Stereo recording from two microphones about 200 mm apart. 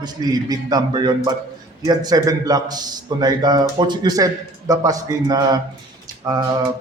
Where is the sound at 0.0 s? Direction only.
20° right (ahead or behind).